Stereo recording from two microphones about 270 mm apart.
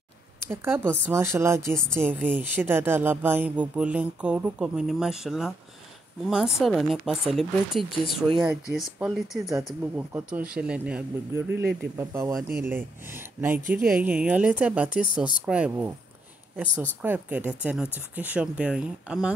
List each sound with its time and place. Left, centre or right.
0.5 s speech: centre
13.6 s speech: right
13.8 s speech: centre
17.0 s speech: centre